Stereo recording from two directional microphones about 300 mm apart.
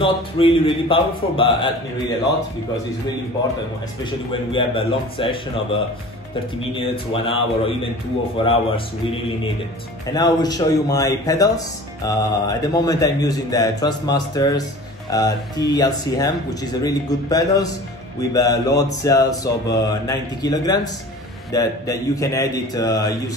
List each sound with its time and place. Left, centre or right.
0.0 s speech: centre
4.0 s speech: centre
6.8 s speech: centre
10.1 s speech: centre